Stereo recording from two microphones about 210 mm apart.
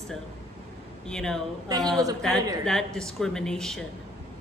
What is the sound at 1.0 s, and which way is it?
Speech, 5° left (ahead or behind).